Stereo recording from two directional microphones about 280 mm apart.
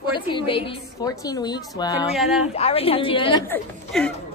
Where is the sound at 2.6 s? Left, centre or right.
Left; by 4.1 s centre.